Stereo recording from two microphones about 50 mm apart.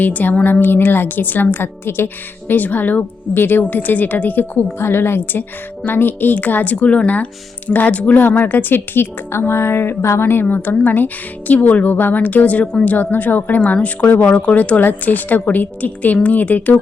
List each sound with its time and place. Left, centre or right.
0.0 s a woman's voice: left
2.5 s a woman's voice: left
8.2 s a woman's voice: left
10.5 s a woman's voice: left